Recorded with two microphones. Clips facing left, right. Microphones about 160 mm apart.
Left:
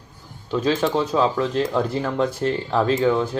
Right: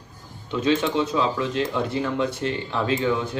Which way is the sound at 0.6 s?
35° left (ahead or behind).